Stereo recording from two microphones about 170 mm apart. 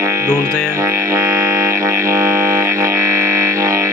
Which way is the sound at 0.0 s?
15° right (ahead or behind).